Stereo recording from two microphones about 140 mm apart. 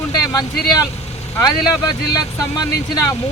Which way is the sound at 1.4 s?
30° left (ahead or behind).